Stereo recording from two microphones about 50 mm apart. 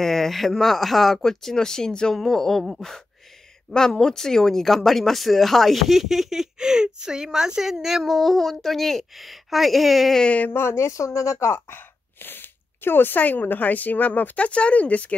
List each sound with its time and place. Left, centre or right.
0.0 s speech: centre
3.7 s speech: centre
10.5 s speech: left
11.1 s speech: left
11.7 s speech: left